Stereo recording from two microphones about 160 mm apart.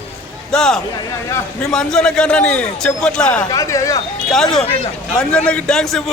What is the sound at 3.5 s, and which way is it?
Speech, 20° left (ahead or behind).